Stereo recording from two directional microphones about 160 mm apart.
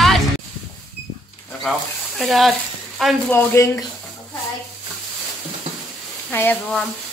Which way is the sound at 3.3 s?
15° left (ahead or behind).